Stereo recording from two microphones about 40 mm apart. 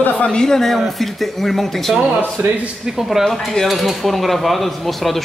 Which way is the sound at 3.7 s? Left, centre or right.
Centre.